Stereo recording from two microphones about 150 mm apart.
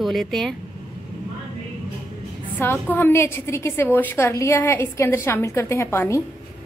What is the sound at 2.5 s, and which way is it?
A woman's voice, 15° left (ahead or behind).